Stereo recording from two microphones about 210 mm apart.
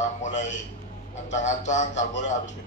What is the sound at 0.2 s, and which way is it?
A man's voice, 35° left (ahead or behind).